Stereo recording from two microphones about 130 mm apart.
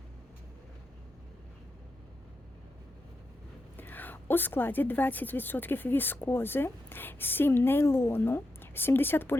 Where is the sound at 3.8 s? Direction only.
15° left (ahead or behind).